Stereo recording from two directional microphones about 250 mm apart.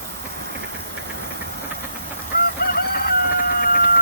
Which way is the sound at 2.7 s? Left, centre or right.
Left.